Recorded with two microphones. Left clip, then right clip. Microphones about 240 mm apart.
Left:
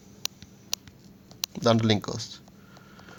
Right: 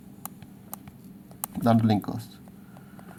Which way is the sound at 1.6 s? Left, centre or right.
Left.